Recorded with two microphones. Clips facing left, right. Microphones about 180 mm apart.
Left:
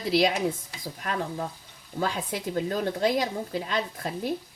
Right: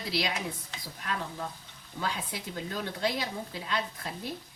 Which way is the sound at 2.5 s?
50° left (ahead or behind).